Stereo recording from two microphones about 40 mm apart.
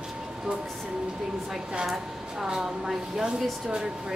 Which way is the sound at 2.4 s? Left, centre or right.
Centre.